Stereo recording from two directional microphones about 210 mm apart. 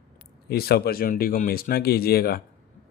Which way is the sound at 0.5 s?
45° left (ahead or behind).